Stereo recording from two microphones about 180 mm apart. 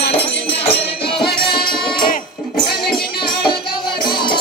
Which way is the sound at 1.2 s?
60° left (ahead or behind).